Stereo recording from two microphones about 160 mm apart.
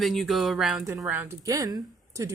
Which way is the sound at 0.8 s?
20° right (ahead or behind).